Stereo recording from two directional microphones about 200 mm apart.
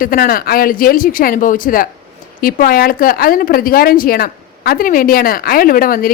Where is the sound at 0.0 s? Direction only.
45° left (ahead or behind).